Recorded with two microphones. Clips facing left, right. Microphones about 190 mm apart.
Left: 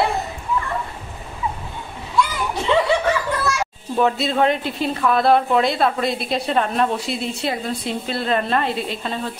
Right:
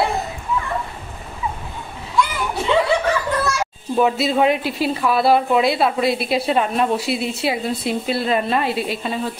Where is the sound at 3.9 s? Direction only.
5° right (ahead or behind).